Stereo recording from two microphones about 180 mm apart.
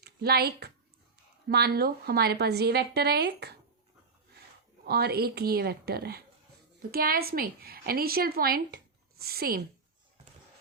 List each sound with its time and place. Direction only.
0.0 s a woman's voice: 60° right (ahead or behind)
4.9 s a woman's voice: 60° right (ahead or behind)